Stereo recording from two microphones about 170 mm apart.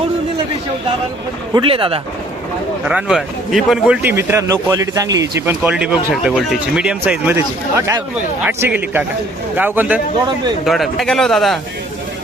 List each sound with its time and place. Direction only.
1.5 s speech: 30° right (ahead or behind)
2.8 s a man's voice: 5° right (ahead or behind); by 5.3 s 20° right (ahead or behind)
5.5 s a man's voice: 5° right (ahead or behind)
10.7 s a man's voice: centre (ahead or behind)